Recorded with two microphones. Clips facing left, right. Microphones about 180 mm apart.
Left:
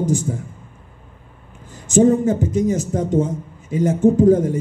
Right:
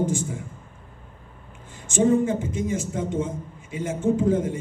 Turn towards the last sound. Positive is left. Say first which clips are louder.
# left 8 dB
turn(degrees=40)  # may be behind; listen again after turning